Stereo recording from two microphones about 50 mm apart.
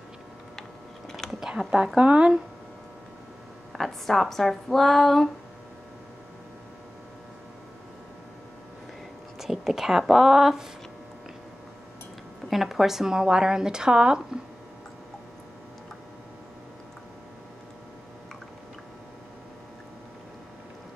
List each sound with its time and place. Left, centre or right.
1.6 s speech: centre
2.0 s speech: centre
3.7 s speech: centre
9.4 s a woman's voice: centre
12.4 s speech: centre